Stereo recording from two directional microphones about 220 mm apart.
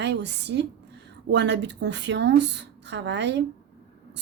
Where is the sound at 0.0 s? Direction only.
50° right (ahead or behind).